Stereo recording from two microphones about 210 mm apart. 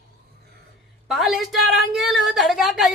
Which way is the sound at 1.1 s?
Centre (ahead or behind).